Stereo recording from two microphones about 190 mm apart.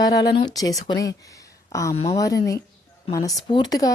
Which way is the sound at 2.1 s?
20° left (ahead or behind).